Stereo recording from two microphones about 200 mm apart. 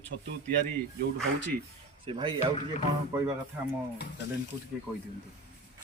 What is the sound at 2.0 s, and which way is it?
Speech, 25° right (ahead or behind).